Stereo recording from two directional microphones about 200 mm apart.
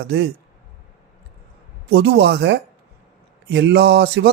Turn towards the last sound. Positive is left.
turn(degrees=-55)  # may be behind; listen again after turning